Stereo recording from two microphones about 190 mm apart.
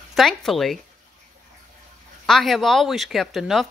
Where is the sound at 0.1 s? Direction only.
Centre (ahead or behind).